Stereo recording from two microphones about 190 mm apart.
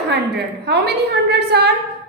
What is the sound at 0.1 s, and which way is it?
A woman's voice, 60° right (ahead or behind).